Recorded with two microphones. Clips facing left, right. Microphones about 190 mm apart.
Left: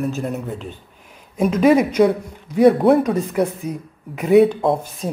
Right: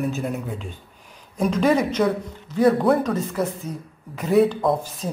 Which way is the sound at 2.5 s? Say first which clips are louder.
Left 5 dB; 25° left (ahead or behind).